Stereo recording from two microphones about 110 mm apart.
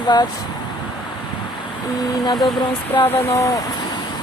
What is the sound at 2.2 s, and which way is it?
Speech, 40° left (ahead or behind).